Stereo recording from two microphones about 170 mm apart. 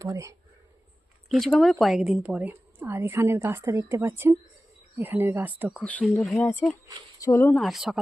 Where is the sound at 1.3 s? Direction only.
Centre (ahead or behind).